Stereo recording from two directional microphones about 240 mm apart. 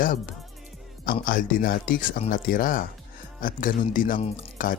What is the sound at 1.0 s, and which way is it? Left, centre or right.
Speech, left.